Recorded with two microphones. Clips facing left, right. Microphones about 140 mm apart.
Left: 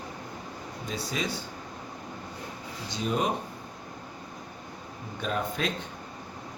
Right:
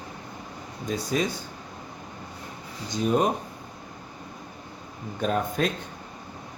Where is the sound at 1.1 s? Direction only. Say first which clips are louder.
Right 7 dB; 45° right (ahead or behind).